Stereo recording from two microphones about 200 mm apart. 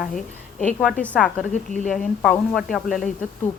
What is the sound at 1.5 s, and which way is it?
Speech, 40° left (ahead or behind).